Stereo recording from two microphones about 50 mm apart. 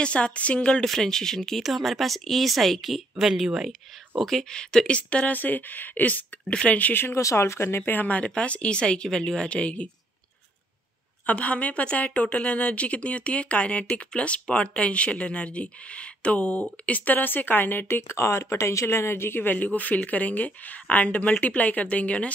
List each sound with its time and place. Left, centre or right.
0.0 s a woman's voice: left
0.8 s speech: centre
4.3 s a woman's voice: centre; by 6.2 s left
6.4 s a woman's voice: left
6.8 s speech: left
7.2 s speech: left
7.8 s a woman's voice: left
11.2 s a woman's voice: left
18.9 s a woman's voice: left